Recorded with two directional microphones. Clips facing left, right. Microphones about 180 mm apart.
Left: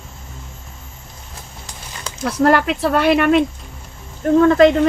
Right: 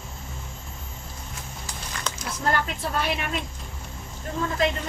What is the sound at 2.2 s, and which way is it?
Speech, 70° left (ahead or behind).